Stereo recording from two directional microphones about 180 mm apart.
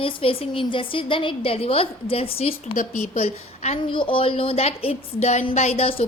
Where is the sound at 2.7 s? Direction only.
45° left (ahead or behind).